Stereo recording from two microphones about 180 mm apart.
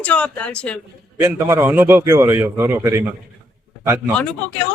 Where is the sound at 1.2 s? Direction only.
15° right (ahead or behind).